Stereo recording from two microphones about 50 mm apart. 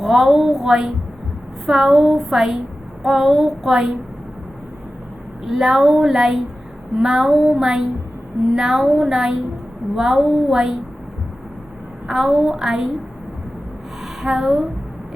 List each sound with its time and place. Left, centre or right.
0.0 s a woman's voice: centre
5.5 s a woman's voice: centre
10.2 s a woman's voice: centre
10.5 s a woman's voice: centre
12.0 s a woman's voice: centre
14.2 s a woman's voice: centre